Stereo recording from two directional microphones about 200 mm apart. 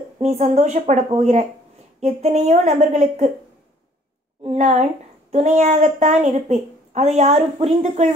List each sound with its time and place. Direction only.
0.2 s a child's voice: 35° right (ahead or behind)
4.4 s a child's voice: 35° right (ahead or behind)